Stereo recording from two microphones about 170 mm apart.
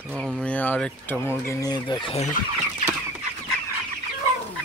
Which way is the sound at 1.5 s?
20° left (ahead or behind).